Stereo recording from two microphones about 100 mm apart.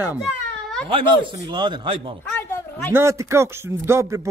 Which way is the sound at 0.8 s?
60° right (ahead or behind).